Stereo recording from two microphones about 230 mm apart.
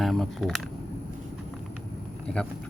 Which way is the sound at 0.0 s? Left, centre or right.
Centre.